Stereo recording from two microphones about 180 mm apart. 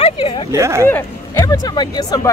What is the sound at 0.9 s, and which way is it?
Speech, 15° left (ahead or behind).